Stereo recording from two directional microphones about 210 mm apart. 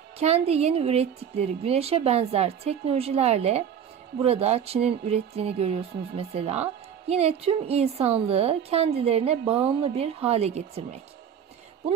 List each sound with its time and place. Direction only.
0.2 s a woman's voice: 30° right (ahead or behind)